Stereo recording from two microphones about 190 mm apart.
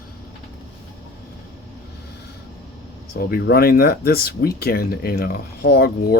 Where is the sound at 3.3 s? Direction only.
55° left (ahead or behind).